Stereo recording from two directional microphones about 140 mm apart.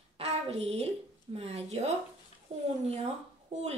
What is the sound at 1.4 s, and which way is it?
A woman's voice, 50° right (ahead or behind).